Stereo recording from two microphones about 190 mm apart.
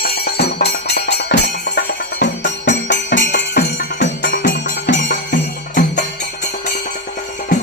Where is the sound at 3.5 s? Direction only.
45° left (ahead or behind).